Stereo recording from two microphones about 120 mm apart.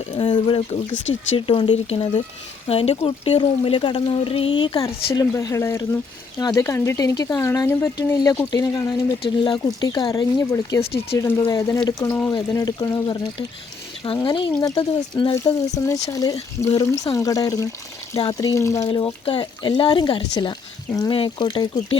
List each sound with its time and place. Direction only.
0.2 s speech: 45° left (ahead or behind)
3.3 s speech: 50° left (ahead or behind)
14.2 s speech: 40° left (ahead or behind)
15.7 s speech: 25° left (ahead or behind)
18.9 s speech: 45° left (ahead or behind)